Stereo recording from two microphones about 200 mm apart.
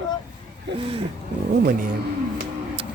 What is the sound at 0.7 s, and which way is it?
Speech, 60° right (ahead or behind).